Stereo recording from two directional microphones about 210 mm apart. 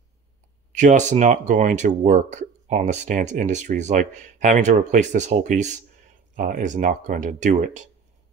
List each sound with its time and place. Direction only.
0.7 s speech: 35° right (ahead or behind)